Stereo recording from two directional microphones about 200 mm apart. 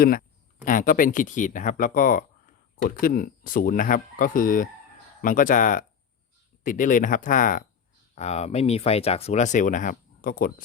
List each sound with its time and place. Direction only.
0.0 s speech: 45° left (ahead or behind)